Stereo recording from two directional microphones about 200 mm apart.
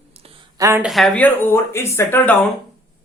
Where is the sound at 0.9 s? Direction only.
Centre (ahead or behind).